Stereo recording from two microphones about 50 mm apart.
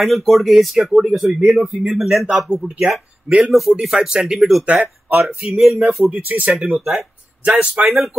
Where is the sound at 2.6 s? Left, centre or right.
Centre.